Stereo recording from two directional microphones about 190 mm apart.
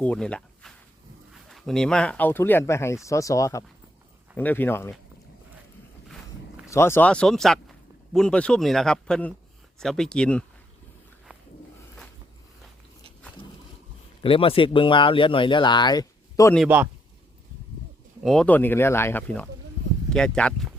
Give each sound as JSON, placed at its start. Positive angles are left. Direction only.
{"t": 0.0, "sound": "speech", "side_deg": 5}
{"t": 6.7, "sound": "speech", "side_deg": 15}
{"t": 14.2, "sound": "speech", "side_deg": 30}
{"t": 16.6, "sound": "a man's voice", "side_deg": -10}
{"t": 18.2, "sound": "speech", "side_deg": 0}